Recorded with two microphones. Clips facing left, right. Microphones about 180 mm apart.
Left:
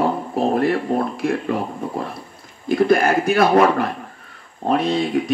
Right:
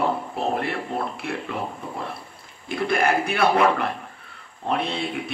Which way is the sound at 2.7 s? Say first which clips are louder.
Left 6 dB; 40° left (ahead or behind).